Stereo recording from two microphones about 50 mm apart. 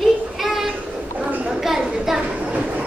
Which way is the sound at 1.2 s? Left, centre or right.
Right.